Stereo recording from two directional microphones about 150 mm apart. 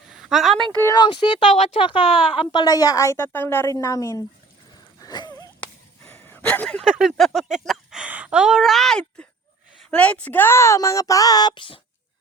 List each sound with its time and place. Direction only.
0.1 s a sound: centre (ahead or behind)
0.9 s speech: 30° left (ahead or behind)
1.5 s speech: 50° left (ahead or behind)
1.8 s a woman's voice: 35° left (ahead or behind); by 4.2 s 20° left (ahead or behind)
4.9 s wheeze: 25° left (ahead or behind)
6.1 s a sound: 15° left (ahead or behind)
6.8 s a woman's voice: 5° right (ahead or behind); by 11.8 s 35° left (ahead or behind)